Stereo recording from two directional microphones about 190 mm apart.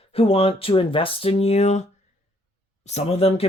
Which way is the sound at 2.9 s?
35° left (ahead or behind).